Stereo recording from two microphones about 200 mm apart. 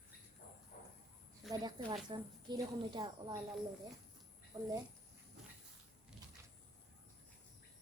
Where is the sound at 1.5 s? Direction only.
20° right (ahead or behind).